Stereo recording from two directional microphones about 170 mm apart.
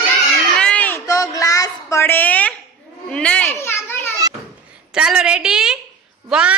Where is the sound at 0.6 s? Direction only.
5° left (ahead or behind).